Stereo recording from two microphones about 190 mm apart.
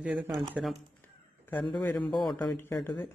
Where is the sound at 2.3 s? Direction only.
10° left (ahead or behind).